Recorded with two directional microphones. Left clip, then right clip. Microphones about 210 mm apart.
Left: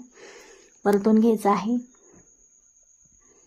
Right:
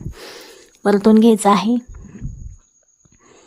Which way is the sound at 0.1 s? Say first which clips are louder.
Right 9 dB; 30° right (ahead or behind).